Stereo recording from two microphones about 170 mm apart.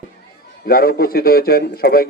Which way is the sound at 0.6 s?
60° left (ahead or behind).